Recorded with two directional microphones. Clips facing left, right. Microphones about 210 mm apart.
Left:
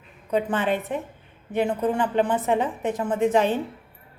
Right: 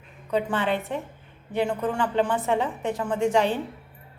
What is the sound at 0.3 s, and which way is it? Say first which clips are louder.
A woman's voice: left 2 dB; 20° left (ahead or behind).